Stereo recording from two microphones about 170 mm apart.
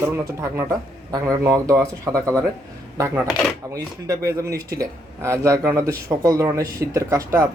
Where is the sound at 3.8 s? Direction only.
20° right (ahead or behind).